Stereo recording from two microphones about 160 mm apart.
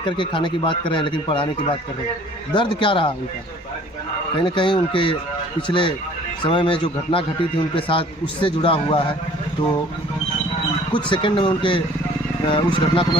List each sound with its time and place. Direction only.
0.0 s speech: 30° left (ahead or behind)
4.4 s speech: 30° left (ahead or behind)
11.1 s speech: 30° left (ahead or behind)